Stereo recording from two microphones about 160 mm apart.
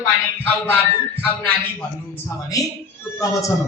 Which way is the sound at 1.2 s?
10° left (ahead or behind).